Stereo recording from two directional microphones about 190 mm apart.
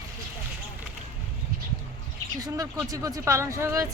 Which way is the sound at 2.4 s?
20° right (ahead or behind).